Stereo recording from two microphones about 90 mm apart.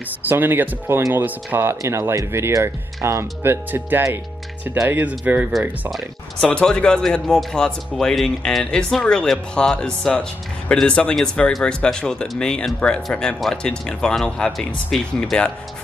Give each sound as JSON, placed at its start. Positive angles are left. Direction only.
{"t": 0.2, "sound": "speech", "side_deg": -20}
{"t": 6.4, "sound": "speech", "side_deg": 10}